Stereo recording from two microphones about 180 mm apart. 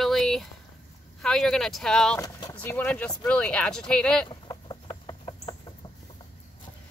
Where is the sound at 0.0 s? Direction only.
Centre (ahead or behind).